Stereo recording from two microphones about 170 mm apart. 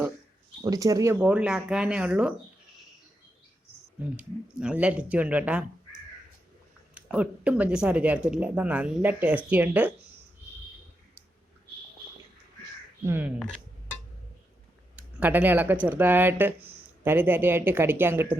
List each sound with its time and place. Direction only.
0.6 s speech: 20° right (ahead or behind)
1.1 s speech: 10° right (ahead or behind)
4.2 s speech: 5° right (ahead or behind)
13.1 s speech: 10° right (ahead or behind)
14.9 s speech: 10° right (ahead or behind)